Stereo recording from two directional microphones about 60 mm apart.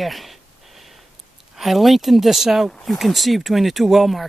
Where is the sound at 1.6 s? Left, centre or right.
Centre.